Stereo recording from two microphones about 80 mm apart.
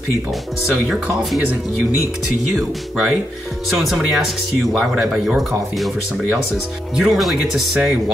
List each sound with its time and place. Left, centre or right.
2.5 s speech: centre
7.0 s speech: centre